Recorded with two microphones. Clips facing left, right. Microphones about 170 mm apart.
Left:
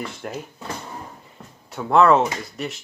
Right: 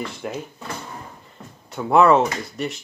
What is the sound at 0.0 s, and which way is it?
Speech, centre (ahead or behind).